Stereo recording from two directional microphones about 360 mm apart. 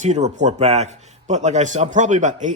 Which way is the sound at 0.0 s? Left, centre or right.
Centre.